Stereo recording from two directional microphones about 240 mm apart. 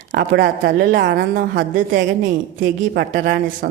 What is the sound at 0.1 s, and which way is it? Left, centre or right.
A woman's voice, right.